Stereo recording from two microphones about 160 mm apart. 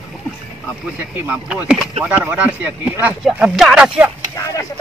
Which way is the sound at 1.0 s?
15° right (ahead or behind).